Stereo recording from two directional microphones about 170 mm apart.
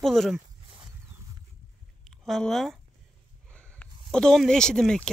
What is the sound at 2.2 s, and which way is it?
Speech, centre (ahead or behind).